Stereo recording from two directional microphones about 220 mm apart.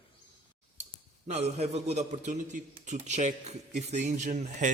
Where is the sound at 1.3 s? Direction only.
30° right (ahead or behind).